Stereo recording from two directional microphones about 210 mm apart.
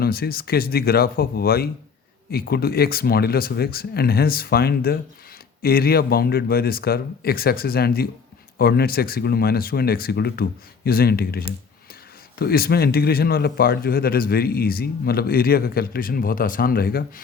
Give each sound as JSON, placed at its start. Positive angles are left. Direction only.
{"t": 0.0, "sound": "speech", "side_deg": 45}